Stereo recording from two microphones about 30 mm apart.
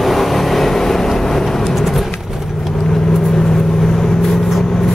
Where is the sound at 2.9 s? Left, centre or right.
Centre.